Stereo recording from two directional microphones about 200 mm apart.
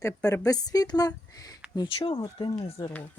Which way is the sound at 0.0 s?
15° left (ahead or behind).